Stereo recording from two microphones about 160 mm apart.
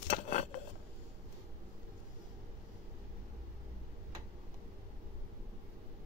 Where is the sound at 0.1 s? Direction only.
50° left (ahead or behind).